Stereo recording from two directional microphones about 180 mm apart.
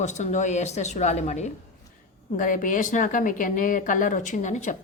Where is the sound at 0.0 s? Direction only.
40° left (ahead or behind).